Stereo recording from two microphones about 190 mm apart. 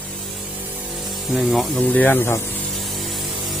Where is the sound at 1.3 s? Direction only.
5° left (ahead or behind).